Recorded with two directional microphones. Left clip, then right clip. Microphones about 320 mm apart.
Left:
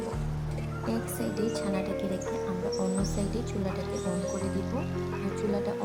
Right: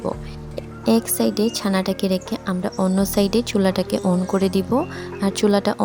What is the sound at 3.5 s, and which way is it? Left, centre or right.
Speech, right.